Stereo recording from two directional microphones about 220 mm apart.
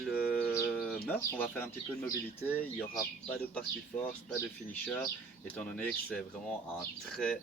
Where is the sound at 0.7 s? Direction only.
5° left (ahead or behind).